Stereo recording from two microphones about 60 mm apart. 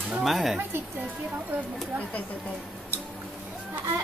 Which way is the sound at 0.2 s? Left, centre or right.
Centre.